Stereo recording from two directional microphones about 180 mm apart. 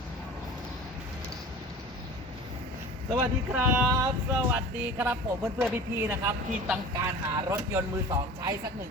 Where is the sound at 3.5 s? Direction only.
10° right (ahead or behind).